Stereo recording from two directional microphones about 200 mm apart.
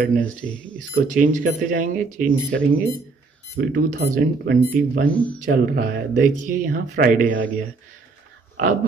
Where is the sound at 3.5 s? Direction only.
55° right (ahead or behind).